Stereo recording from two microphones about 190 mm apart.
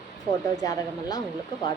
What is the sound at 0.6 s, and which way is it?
Speech, 20° left (ahead or behind).